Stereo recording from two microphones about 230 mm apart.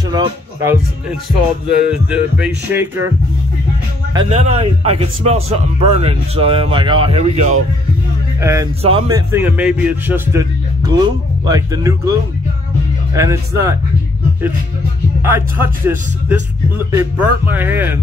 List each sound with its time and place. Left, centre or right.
0.1 s speech: centre
1.7 s music: centre
4.1 s a man's voice: right
8.4 s speech: centre
11.4 s speech: centre
15.2 s speech: centre